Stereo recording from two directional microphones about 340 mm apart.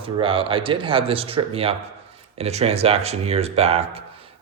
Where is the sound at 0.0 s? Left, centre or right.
Centre.